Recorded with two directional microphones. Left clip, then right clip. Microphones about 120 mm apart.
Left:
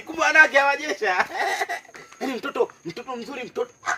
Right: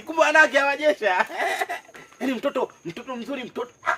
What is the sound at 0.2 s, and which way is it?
A man's voice, 40° right (ahead or behind).